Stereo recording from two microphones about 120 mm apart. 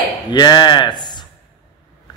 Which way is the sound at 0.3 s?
35° left (ahead or behind).